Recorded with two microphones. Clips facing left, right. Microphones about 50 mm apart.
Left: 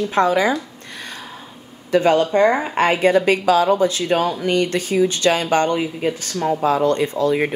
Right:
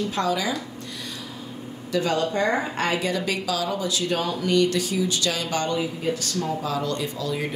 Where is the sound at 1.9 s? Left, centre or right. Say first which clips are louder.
Left 8 dB; left.